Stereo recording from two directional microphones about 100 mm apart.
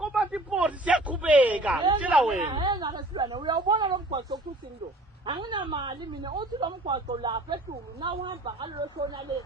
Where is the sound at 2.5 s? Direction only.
50° right (ahead or behind).